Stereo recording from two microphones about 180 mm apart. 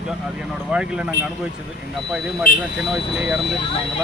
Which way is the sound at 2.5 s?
55° left (ahead or behind).